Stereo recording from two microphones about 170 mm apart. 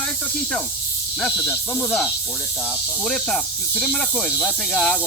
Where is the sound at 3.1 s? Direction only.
Centre (ahead or behind).